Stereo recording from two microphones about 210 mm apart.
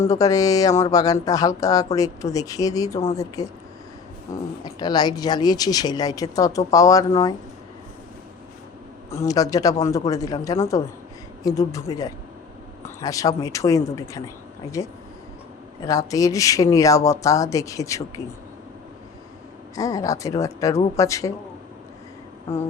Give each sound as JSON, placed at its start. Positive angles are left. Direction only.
{"t": 0.0, "sound": "speech", "side_deg": 15}
{"t": 9.0, "sound": "speech", "side_deg": 15}
{"t": 15.8, "sound": "speech", "side_deg": 15}
{"t": 19.7, "sound": "speech", "side_deg": 15}